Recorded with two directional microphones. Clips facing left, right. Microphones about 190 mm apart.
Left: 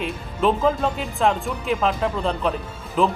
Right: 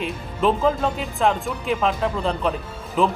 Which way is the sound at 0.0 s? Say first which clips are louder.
Even; centre (ahead or behind).